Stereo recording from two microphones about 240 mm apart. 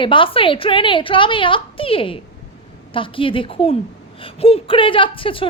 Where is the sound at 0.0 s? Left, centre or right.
Left.